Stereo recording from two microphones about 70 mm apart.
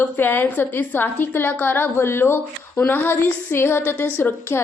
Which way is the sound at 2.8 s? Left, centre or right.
Left.